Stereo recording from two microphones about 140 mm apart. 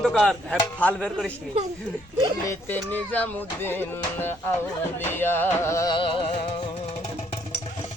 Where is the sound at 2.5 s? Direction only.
15° left (ahead or behind).